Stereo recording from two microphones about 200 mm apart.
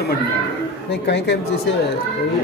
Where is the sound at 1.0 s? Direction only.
60° left (ahead or behind).